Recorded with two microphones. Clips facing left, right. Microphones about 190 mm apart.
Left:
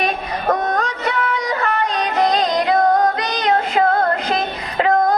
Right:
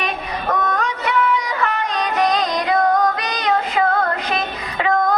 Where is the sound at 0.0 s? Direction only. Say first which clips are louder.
Left 4 dB; 40° left (ahead or behind).